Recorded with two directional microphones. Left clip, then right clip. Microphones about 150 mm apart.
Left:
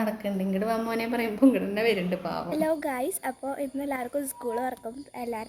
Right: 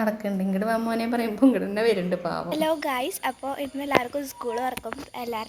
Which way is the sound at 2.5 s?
30° left (ahead or behind).